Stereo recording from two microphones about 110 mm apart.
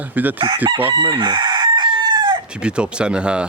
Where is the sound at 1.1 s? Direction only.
40° right (ahead or behind).